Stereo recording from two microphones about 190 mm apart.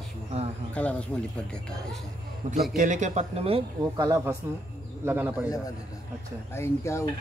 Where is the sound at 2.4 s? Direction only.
40° right (ahead or behind).